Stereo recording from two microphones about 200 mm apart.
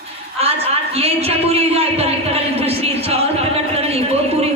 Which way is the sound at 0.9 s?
30° right (ahead or behind).